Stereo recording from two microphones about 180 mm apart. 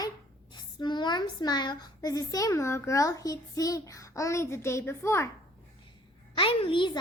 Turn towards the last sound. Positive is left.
turn(degrees=30)  # may be behind; listen again after turning